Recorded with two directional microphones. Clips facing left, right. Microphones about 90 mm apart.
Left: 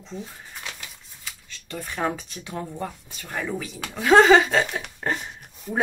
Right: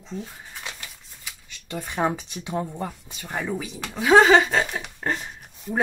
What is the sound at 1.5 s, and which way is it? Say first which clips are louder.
Speech: right 2 dB; 15° right (ahead or behind).